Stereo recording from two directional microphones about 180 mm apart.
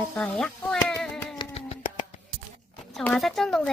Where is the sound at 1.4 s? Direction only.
35° left (ahead or behind).